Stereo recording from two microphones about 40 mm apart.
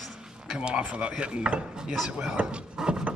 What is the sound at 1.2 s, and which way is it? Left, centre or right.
Wood, right.